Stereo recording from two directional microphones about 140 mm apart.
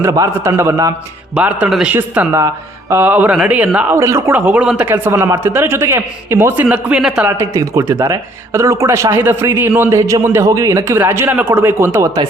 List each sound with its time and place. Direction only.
0.0 s a man's voice: 25° right (ahead or behind)
1.4 s a man's voice: 10° right (ahead or behind)